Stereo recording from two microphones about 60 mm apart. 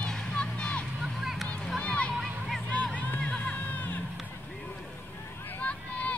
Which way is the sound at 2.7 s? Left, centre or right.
Left.